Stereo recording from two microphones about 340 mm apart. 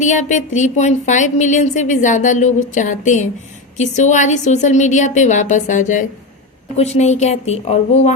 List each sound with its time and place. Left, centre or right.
0.0 s speech: left